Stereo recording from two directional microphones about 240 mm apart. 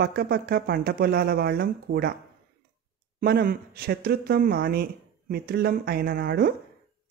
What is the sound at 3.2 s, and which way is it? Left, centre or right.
Speech, right.